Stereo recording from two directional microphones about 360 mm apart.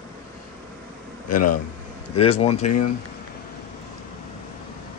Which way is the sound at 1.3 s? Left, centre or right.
Left.